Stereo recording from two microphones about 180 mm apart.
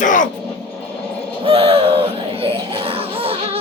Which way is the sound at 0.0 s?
45° left (ahead or behind).